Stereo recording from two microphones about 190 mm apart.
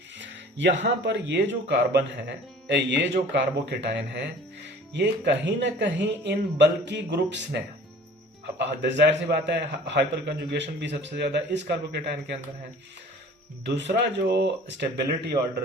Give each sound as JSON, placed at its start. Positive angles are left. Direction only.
{"t": 0.2, "sound": "music", "side_deg": -70}
{"t": 0.8, "sound": "a man's voice", "side_deg": -70}
{"t": 13.7, "sound": "a man's voice", "side_deg": -65}